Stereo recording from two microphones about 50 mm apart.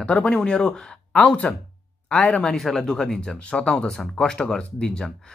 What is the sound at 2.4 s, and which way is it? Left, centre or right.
Speech, centre.